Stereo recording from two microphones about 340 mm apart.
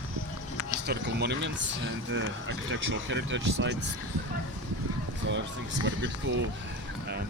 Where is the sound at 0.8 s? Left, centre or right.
Right.